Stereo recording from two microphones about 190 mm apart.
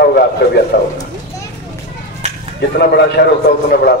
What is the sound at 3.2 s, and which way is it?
Speech, 65° left (ahead or behind).